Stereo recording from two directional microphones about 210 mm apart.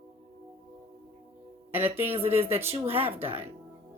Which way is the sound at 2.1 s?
30° right (ahead or behind).